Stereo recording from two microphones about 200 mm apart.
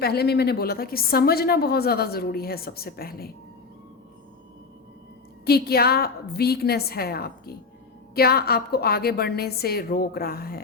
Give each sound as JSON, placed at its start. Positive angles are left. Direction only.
{"t": 0.0, "sound": "a woman's voice", "side_deg": 55}
{"t": 5.5, "sound": "a woman's voice", "side_deg": 50}